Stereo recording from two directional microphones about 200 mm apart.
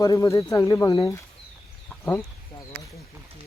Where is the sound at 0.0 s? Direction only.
15° left (ahead or behind).